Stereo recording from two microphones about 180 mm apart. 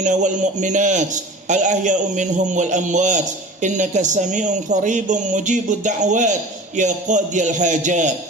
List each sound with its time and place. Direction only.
0.0 s a man's voice: 40° right (ahead or behind)